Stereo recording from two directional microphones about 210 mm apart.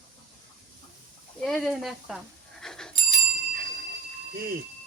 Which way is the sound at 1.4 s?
Centre (ahead or behind).